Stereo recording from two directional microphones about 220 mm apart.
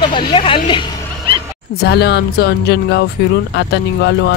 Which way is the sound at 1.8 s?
50° left (ahead or behind).